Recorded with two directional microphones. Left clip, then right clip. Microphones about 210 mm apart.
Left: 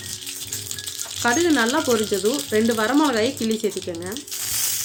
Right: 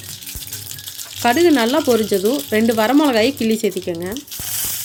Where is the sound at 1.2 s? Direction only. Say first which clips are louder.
Right 5 dB; 40° right (ahead or behind).